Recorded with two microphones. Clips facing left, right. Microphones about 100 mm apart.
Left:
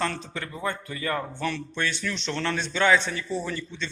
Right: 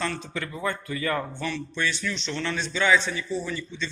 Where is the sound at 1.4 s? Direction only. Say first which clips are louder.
Left 1 dB; 50° left (ahead or behind).